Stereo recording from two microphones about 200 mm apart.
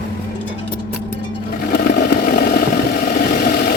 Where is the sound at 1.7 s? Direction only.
45° left (ahead or behind).